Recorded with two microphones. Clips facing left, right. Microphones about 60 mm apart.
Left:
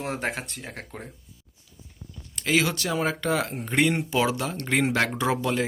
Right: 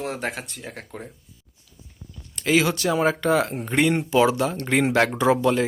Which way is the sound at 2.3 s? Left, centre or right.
Centre.